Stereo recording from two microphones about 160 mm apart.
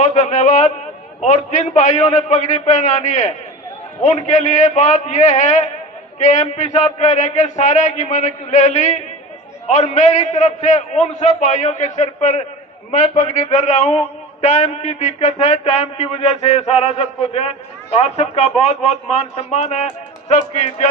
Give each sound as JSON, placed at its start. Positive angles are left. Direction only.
{"t": 0.0, "sound": "a man's voice", "side_deg": 45}